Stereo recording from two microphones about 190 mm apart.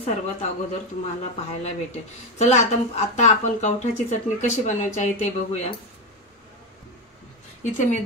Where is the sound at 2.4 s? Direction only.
35° left (ahead or behind).